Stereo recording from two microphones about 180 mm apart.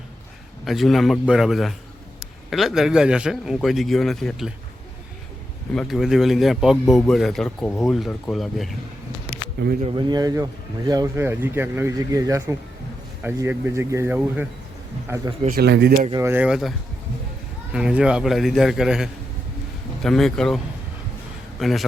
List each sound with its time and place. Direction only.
0.6 s a man's voice: centre (ahead or behind)
5.7 s a man's voice: centre (ahead or behind)
9.8 s speech: 25° right (ahead or behind)
15.4 s speech: 60° right (ahead or behind)
16.1 s a man's voice: 15° right (ahead or behind); by 20.6 s 5° left (ahead or behind)
21.6 s a man's voice: centre (ahead or behind)